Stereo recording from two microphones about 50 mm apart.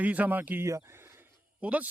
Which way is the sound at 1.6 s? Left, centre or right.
Right.